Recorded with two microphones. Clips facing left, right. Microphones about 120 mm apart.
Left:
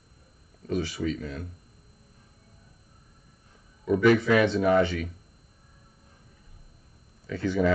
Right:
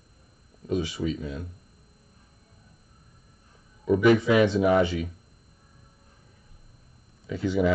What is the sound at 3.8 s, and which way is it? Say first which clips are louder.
Speech: right 1 dB; 20° right (ahead or behind).